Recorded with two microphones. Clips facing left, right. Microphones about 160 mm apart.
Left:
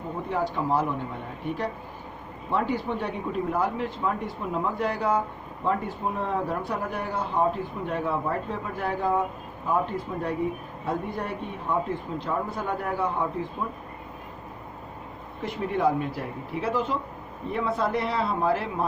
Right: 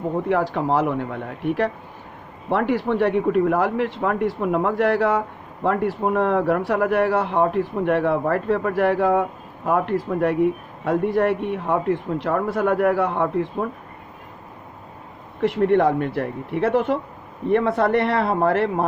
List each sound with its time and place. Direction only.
0.3 s speech: 80° right
15.4 s speech: 75° right (ahead or behind)